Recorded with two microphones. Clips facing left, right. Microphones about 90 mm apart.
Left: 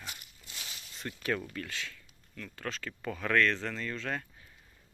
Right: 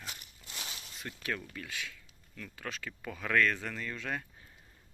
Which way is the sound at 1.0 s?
Centre (ahead or behind).